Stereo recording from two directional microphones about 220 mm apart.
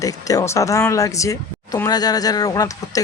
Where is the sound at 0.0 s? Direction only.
15° left (ahead or behind).